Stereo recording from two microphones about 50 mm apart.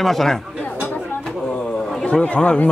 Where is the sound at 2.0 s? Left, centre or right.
Left.